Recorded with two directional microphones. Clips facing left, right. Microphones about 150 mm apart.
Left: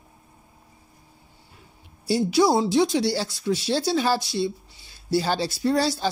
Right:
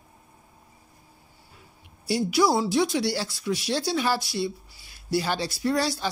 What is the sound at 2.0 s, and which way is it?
Speech, 25° left (ahead or behind).